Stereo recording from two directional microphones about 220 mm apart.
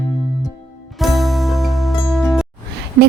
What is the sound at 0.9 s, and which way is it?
Music, centre (ahead or behind).